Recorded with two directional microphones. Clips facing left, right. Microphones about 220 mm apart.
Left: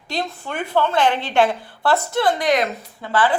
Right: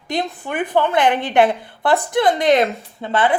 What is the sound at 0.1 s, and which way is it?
A woman's voice, 15° right (ahead or behind).